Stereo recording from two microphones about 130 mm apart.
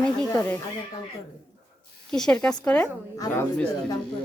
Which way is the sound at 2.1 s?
5° left (ahead or behind).